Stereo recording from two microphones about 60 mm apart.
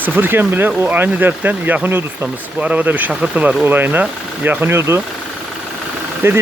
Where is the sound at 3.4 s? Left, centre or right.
Right.